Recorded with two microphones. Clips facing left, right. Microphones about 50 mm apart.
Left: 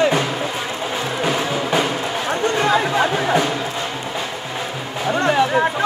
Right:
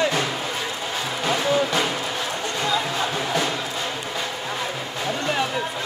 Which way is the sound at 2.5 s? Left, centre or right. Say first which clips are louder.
Left 6 dB; left.